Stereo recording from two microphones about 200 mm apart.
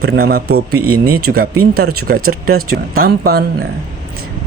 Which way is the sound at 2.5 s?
50° right (ahead or behind).